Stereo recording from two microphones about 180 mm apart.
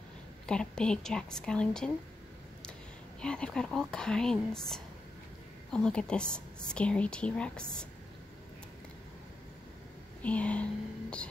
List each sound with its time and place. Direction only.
0.5 s speech: 5° left (ahead or behind)
3.2 s speech: 5° left (ahead or behind)
10.2 s speech: 5° left (ahead or behind)